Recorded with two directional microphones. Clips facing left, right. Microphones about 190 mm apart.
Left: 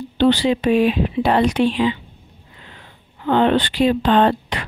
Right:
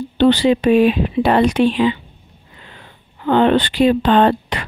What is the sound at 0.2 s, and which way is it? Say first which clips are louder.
Speech: right 3 dB; 55° right (ahead or behind).